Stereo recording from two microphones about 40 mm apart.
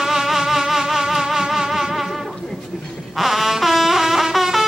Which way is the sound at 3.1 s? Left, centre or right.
Centre.